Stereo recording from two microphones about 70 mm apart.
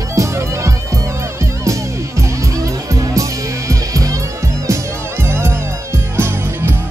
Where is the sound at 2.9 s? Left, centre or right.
Right.